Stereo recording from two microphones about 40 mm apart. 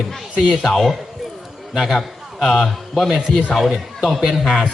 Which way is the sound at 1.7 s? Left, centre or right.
Centre.